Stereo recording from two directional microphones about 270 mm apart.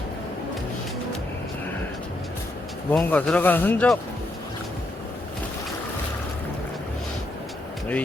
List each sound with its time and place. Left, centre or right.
2.9 s speech: centre